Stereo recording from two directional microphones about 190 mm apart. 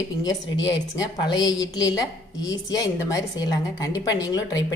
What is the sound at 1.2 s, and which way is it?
A woman's voice, 20° left (ahead or behind).